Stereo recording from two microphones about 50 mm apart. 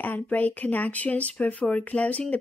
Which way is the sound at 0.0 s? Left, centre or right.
Left.